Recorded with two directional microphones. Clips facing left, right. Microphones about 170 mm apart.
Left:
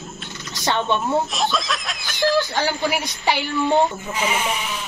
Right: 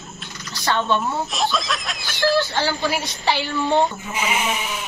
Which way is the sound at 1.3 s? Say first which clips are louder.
Even; centre (ahead or behind).